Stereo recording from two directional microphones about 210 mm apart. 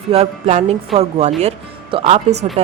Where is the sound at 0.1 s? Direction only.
30° right (ahead or behind).